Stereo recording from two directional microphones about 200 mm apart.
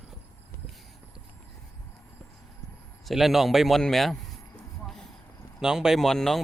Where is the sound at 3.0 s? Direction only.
Centre (ahead or behind).